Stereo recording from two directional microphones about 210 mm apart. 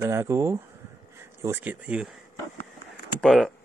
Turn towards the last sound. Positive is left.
turn(degrees=0)  # may be behind; listen again after turning